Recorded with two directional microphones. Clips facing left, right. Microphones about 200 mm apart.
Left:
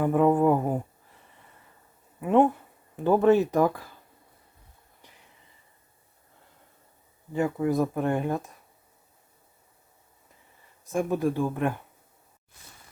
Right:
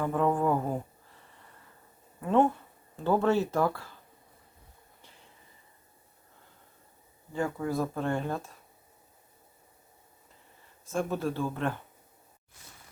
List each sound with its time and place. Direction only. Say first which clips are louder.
0.0 s speech: left 6 dB; 15° left (ahead or behind)
2.2 s speech: left 4 dB; 15° left (ahead or behind)
7.3 s speech: left 5 dB; 20° left (ahead or behind)
10.9 s speech: left 5 dB; 15° left (ahead or behind)